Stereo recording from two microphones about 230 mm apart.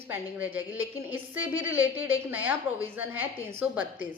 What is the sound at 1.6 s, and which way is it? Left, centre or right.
A woman's voice, centre.